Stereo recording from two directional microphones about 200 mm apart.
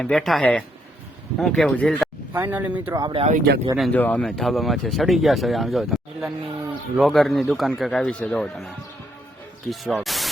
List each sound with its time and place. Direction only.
0.0 s speech: centre (ahead or behind)
2.3 s speech: 10° right (ahead or behind)
3.0 s speech: 25° right (ahead or behind)
3.2 s speech: 45° right (ahead or behind)
3.8 s speech: 5° left (ahead or behind)